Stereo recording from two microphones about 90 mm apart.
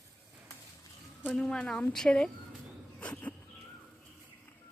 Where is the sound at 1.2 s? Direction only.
10° left (ahead or behind).